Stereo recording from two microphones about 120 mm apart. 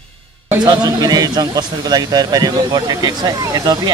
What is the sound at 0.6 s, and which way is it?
Speech, 35° right (ahead or behind).